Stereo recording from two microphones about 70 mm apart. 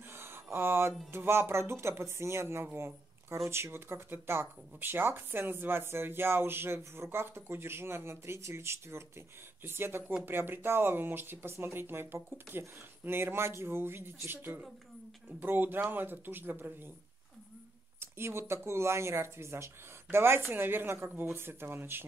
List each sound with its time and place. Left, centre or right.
0.1 s a sound: right
1.1 s speech: right
17.9 s speech: right